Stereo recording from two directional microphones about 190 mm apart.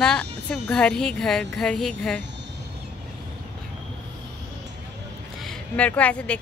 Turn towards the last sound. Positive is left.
turn(degrees=5)  # may be behind; listen again after turning